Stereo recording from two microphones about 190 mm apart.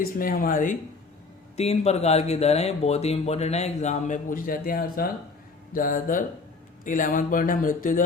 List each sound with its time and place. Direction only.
0.0 s speech: 50° left (ahead or behind)